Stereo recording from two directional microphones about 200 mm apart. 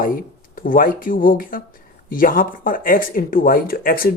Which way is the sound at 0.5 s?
45° left (ahead or behind).